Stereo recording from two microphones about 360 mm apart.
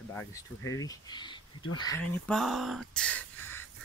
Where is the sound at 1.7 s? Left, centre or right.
Centre.